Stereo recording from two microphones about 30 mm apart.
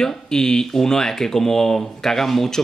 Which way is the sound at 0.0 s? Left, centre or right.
Centre.